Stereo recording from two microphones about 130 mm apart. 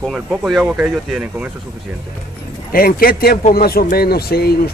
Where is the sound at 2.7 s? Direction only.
90° left.